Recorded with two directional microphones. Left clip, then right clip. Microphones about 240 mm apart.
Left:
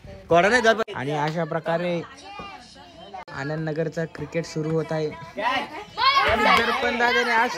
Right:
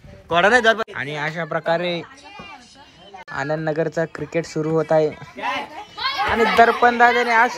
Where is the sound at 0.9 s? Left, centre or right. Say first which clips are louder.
Even; centre.